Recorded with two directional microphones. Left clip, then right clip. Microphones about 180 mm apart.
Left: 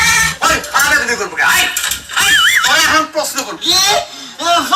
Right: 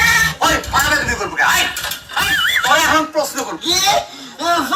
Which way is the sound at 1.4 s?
60° right (ahead or behind).